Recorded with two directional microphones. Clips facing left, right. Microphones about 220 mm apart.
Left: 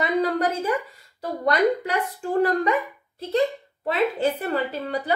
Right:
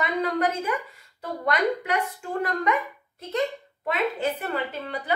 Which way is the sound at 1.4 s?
35° left (ahead or behind).